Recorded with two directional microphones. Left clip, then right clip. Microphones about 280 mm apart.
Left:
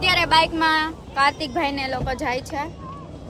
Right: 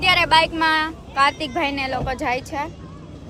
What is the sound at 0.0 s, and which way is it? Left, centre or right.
Speech, centre.